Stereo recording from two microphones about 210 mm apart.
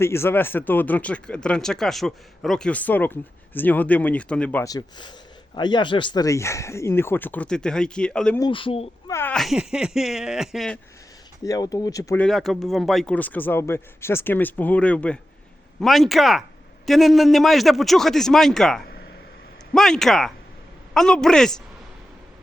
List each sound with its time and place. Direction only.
0.0 s speech: 10° left (ahead or behind)
8.4 s speech: 25° left (ahead or behind)
9.0 s a man's voice: 10° left (ahead or behind)
11.4 s a man's voice: 15° left (ahead or behind)